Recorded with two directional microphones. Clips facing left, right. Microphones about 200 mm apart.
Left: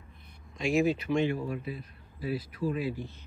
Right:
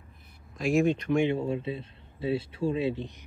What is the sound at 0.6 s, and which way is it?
Speech, centre (ahead or behind).